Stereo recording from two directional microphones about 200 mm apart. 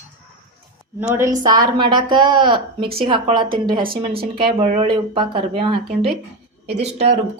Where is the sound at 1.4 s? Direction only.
20° right (ahead or behind).